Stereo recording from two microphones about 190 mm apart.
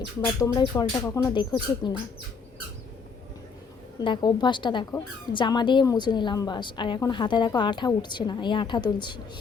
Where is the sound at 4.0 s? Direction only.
25° left (ahead or behind).